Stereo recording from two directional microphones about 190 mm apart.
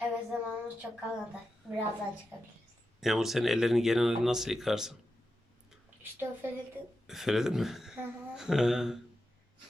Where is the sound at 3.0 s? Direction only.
Centre (ahead or behind).